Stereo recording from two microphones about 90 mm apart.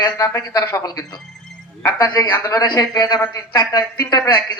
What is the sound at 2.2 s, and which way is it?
Speech, 25° left (ahead or behind).